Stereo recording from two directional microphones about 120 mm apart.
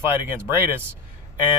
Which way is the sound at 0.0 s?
20° right (ahead or behind).